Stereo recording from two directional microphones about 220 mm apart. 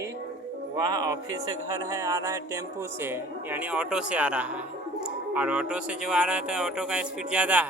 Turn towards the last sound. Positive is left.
turn(degrees=-5)  # may be behind; listen again after turning